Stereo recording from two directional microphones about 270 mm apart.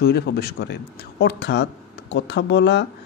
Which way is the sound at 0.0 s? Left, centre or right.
Left.